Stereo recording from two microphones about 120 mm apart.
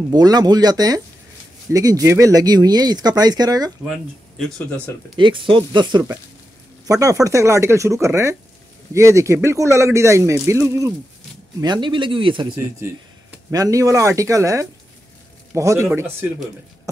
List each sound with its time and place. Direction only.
0.1 s speech: 35° right (ahead or behind)
5.1 s speech: 45° right (ahead or behind)
6.9 s speech: 25° right (ahead or behind)
11.6 s speech: 40° right (ahead or behind)
13.5 s speech: 30° right (ahead or behind)